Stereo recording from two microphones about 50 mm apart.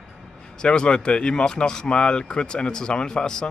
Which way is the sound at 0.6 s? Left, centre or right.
Centre.